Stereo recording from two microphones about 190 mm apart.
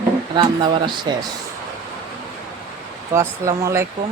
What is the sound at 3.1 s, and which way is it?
Speech, 15° right (ahead or behind).